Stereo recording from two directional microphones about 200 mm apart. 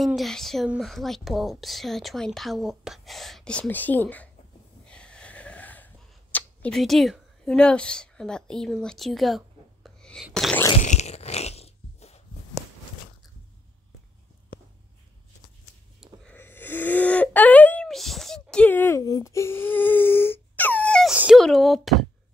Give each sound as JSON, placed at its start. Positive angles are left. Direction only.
{"t": 0.0, "sound": "speech", "side_deg": 0}
{"t": 4.8, "sound": "wheeze", "side_deg": 5}
{"t": 6.3, "sound": "speech", "side_deg": 5}
{"t": 9.8, "sound": "a sound", "side_deg": 0}
{"t": 10.8, "sound": "fart", "side_deg": 35}
{"t": 16.0, "sound": "a sound", "side_deg": 10}